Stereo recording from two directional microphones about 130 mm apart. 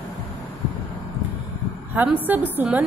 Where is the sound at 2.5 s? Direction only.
10° right (ahead or behind).